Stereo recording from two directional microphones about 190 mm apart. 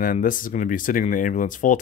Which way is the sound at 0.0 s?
45° left (ahead or behind).